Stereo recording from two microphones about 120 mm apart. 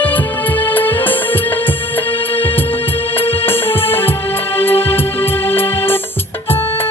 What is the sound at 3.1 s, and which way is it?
Music, 50° left (ahead or behind).